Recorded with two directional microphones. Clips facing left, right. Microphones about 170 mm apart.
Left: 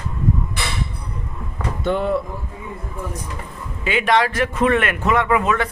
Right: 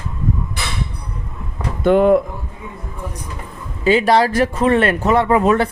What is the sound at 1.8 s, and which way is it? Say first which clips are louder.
Speech: right 8 dB; 55° right (ahead or behind).